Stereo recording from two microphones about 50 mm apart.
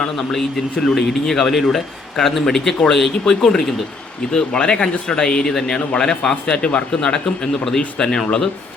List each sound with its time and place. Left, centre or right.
0.0 s speech: centre